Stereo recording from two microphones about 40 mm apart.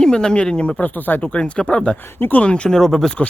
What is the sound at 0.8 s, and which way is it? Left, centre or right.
Speech, left.